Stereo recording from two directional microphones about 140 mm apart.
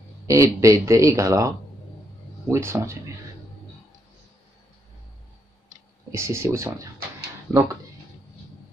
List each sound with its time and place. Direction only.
0.3 s speech: 20° right (ahead or behind)
2.5 s speech: 20° right (ahead or behind)
6.1 s speech: 20° right (ahead or behind)